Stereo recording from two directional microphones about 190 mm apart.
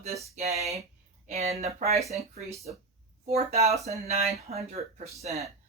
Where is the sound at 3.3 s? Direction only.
35° right (ahead or behind).